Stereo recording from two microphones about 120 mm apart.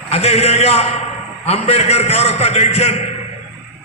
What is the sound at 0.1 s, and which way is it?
A man's voice, 60° left (ahead or behind).